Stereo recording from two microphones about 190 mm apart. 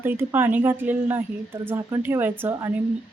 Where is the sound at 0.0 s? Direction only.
10° right (ahead or behind).